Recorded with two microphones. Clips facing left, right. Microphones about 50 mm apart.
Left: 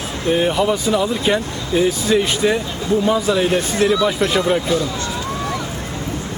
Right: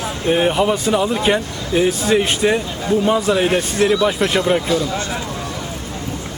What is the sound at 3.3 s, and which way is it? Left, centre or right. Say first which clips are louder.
Speech: even; right.